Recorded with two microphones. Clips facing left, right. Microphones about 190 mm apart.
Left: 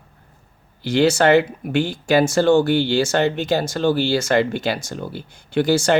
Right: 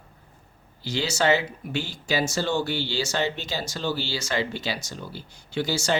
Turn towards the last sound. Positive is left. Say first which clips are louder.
# left 9 dB
turn(degrees=55)  # may be behind; listen again after turning